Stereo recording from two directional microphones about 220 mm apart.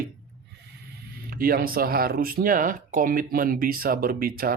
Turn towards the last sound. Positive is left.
turn(degrees=-40)  # may be behind; listen again after turning